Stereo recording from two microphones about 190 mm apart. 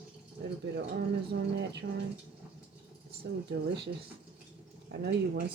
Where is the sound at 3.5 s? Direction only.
65° right (ahead or behind).